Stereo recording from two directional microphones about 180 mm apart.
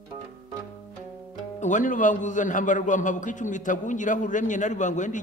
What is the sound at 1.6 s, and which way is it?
A man's voice, 45° left (ahead or behind).